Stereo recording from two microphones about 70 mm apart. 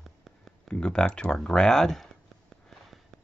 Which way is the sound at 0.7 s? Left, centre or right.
Centre.